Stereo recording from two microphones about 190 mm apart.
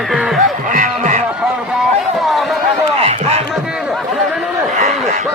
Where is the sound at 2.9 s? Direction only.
35° right (ahead or behind).